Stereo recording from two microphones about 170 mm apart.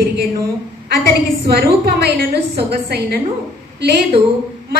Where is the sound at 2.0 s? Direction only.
75° right (ahead or behind).